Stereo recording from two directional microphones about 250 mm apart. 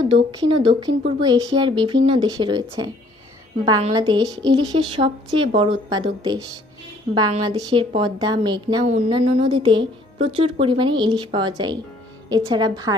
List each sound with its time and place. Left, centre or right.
0.1 s a woman's voice: centre
8.8 s a woman's voice: right